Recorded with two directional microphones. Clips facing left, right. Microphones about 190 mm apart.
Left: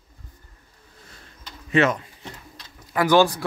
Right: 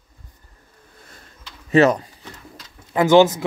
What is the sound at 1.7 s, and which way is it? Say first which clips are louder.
Speech: right 5 dB; 35° right (ahead or behind).